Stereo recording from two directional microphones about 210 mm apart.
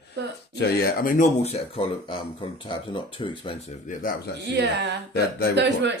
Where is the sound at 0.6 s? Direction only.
45° left (ahead or behind); by 3.6 s 25° left (ahead or behind).